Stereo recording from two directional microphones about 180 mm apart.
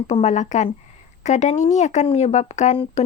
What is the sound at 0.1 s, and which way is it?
Speech, 35° left (ahead or behind).